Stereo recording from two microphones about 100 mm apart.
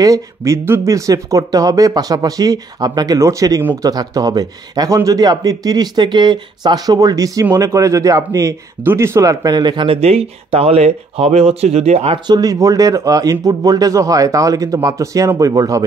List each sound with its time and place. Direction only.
0.0 s a man's voice: 30° right (ahead or behind)
9.8 s speech: 80° right
12.3 s a man's voice: 40° right (ahead or behind)